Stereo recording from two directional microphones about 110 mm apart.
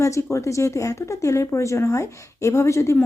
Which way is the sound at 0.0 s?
25° left (ahead or behind).